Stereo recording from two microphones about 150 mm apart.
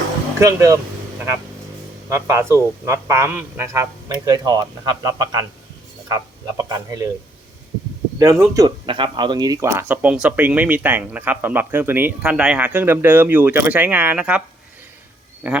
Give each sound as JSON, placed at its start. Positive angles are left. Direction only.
{"t": 0.3, "sound": "a man's voice", "side_deg": -20}
{"t": 2.0, "sound": "a man's voice", "side_deg": -20}
{"t": 8.2, "sound": "a man's voice", "side_deg": -20}
{"t": 8.9, "sound": "speech", "side_deg": -35}
{"t": 15.4, "sound": "speech", "side_deg": -10}